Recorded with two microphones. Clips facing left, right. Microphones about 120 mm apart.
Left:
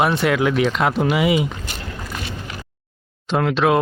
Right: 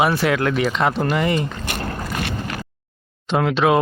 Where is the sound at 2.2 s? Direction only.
65° right (ahead or behind).